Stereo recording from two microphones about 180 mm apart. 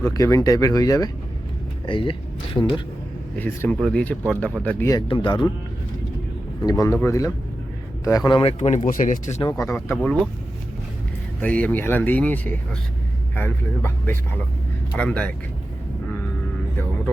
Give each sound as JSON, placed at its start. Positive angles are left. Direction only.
{"t": 0.0, "sound": "speech", "side_deg": 15}
{"t": 3.3, "sound": "speech", "side_deg": 10}
{"t": 5.0, "sound": "speech", "side_deg": 25}
{"t": 6.6, "sound": "speech", "side_deg": 20}
{"t": 8.5, "sound": "speech", "side_deg": 40}
{"t": 9.4, "sound": "speech", "side_deg": 15}
{"t": 11.3, "sound": "speech", "side_deg": 5}